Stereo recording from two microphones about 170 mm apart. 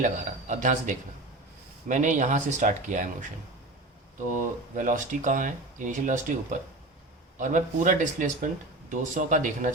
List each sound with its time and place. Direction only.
0.0 s speech: 50° right (ahead or behind)
4.3 s speech: 50° right (ahead or behind)